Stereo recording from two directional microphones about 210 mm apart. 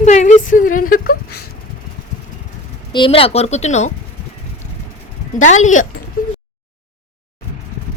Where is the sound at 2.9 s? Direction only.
25° left (ahead or behind).